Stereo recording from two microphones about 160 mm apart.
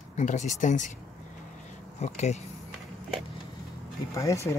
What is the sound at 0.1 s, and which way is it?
Speech, 50° left (ahead or behind).